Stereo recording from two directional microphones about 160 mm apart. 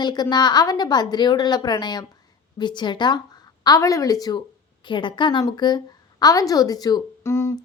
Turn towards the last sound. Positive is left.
turn(degrees=15)  # may be behind; listen again after turning